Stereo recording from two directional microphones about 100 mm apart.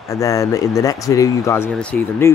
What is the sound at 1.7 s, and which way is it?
Speech, 10° left (ahead or behind).